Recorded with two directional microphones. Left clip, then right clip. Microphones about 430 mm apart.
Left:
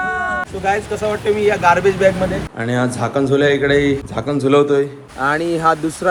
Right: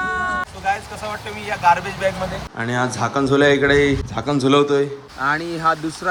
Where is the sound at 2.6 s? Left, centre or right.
Centre.